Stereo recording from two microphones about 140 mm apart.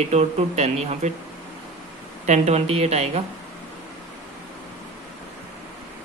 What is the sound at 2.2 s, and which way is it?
Speech, 50° right (ahead or behind).